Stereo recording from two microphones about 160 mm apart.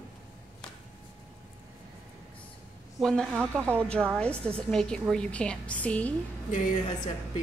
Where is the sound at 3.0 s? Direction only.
5° left (ahead or behind).